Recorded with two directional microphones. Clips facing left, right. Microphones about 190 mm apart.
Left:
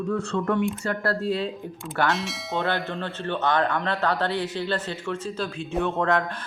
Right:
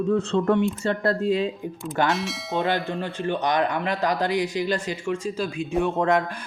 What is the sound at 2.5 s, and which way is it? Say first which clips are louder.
Speech: right 2 dB; 15° right (ahead or behind).